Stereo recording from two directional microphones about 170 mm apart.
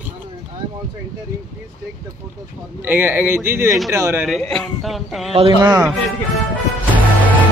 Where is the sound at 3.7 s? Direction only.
Centre (ahead or behind).